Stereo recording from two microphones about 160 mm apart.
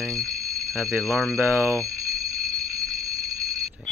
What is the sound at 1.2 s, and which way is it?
Speech, 20° right (ahead or behind).